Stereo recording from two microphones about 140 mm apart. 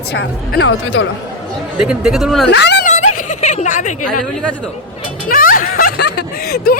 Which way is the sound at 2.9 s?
60° left (ahead or behind).